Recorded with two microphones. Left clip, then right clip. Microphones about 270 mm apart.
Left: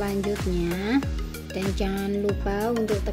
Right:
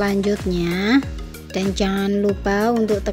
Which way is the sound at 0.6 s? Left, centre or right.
Right.